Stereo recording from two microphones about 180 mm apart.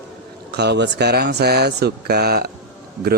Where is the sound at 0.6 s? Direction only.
70° right (ahead or behind).